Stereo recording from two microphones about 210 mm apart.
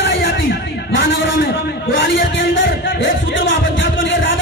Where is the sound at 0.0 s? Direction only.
60° left (ahead or behind).